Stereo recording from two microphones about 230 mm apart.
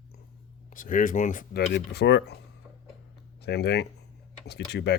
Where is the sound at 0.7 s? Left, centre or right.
Left.